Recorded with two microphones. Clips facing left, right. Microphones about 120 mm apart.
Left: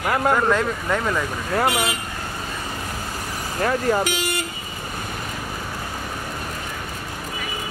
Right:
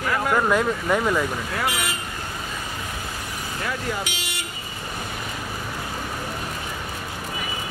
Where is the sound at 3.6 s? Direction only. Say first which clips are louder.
Left 9 dB; 45° left (ahead or behind).